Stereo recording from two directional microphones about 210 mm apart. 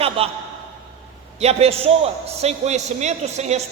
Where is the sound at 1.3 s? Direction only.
30° right (ahead or behind).